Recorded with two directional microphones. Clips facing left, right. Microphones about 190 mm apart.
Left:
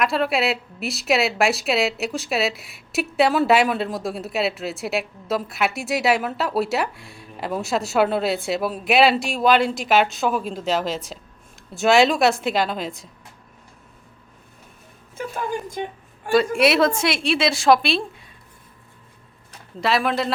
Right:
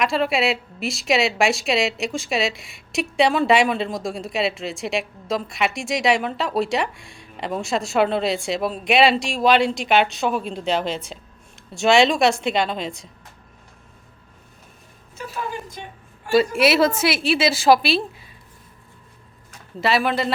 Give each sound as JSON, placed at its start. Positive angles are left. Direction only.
{"t": 0.0, "sound": "a woman's voice", "side_deg": 0}
{"t": 15.2, "sound": "speech", "side_deg": 50}
{"t": 16.6, "sound": "a woman's voice", "side_deg": 0}
{"t": 19.8, "sound": "a woman's voice", "side_deg": 0}